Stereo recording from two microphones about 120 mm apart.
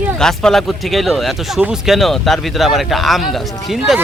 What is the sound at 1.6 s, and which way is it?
Speech, 10° right (ahead or behind).